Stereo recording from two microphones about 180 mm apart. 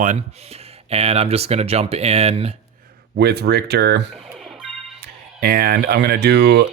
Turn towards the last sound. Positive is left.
turn(degrees=-65)  # may be behind; listen again after turning